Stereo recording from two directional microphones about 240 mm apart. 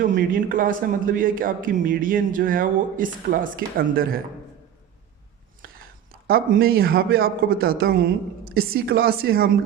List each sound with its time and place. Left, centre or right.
0.2 s speech: right
5.6 s a sound: right
6.2 s speech: right